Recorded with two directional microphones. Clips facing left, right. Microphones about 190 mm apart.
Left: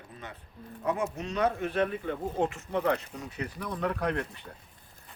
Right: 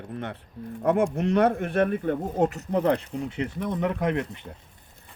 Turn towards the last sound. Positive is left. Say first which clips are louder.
# right 5 dB
turn(degrees=-20)  # may be behind; listen again after turning